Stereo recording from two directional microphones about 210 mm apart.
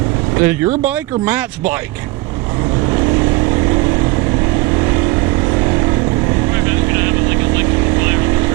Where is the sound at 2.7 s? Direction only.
15° right (ahead or behind).